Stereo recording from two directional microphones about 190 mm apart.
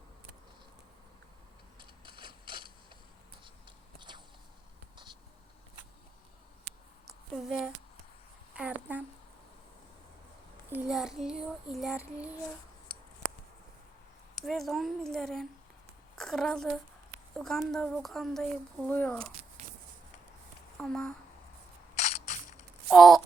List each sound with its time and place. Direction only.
1.8 s mechanisms: 25° right (ahead or behind)
7.1 s a sound: centre (ahead or behind)
10.7 s child singing: centre (ahead or behind)
14.4 s a woman's voice: centre (ahead or behind)
20.7 s speech: 5° left (ahead or behind)
21.9 s single-lens reflex camera: 35° left (ahead or behind)
22.9 s a sound: centre (ahead or behind)